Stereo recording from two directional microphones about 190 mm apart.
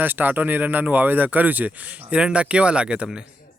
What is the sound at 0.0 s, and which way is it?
Speech, 10° right (ahead or behind).